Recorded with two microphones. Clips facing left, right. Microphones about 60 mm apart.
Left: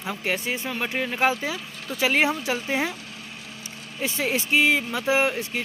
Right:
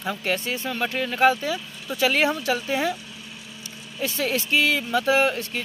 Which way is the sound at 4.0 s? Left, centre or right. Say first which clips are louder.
Even; centre.